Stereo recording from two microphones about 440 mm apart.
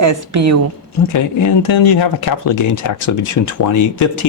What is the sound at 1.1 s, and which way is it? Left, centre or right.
Speech, left.